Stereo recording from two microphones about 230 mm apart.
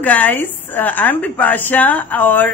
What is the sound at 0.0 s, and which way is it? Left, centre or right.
Speech, centre.